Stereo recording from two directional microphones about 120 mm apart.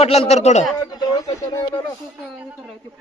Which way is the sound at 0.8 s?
35° left (ahead or behind).